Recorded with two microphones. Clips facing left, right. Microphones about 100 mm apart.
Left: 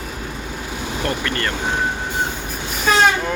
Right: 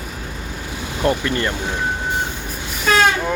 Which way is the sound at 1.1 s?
20° right (ahead or behind).